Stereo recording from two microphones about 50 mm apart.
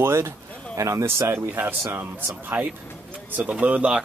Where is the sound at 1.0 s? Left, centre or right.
Right.